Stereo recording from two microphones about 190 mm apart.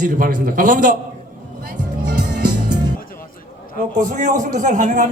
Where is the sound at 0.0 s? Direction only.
45° right (ahead or behind).